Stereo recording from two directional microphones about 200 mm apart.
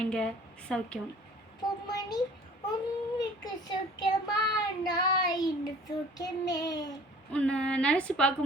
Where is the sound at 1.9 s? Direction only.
20° left (ahead or behind).